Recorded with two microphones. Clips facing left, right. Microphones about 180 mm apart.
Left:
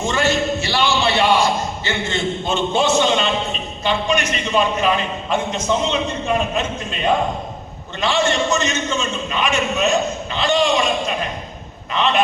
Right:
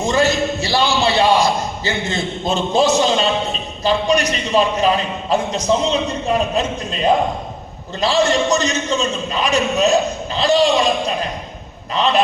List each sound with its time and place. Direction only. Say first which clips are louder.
0.0 s a man's voice: right 2 dB; 35° right (ahead or behind)